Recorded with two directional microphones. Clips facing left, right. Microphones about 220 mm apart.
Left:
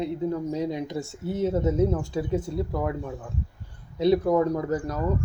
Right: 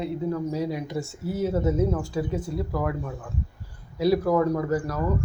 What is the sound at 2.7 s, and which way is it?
Speech, 25° left (ahead or behind).